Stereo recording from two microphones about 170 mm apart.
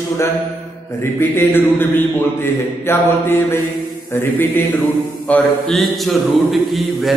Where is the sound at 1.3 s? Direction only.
10° left (ahead or behind).